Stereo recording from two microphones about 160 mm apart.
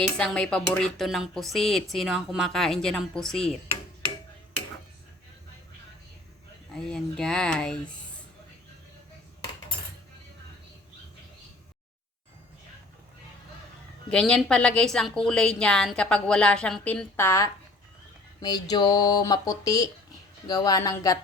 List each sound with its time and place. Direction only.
0.2 s speech: 5° left (ahead or behind)
6.7 s speech: 5° left (ahead or behind)
14.1 s speech: 5° left (ahead or behind); by 21.2 s 20° left (ahead or behind)